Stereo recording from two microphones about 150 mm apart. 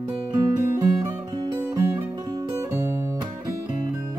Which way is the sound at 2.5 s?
15° right (ahead or behind).